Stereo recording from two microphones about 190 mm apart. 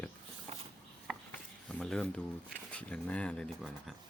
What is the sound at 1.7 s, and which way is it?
Speech, 5° left (ahead or behind).